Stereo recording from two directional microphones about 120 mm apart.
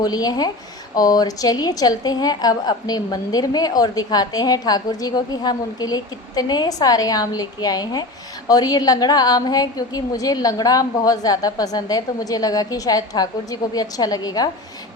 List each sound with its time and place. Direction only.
0.0 s a woman's voice: 35° left (ahead or behind)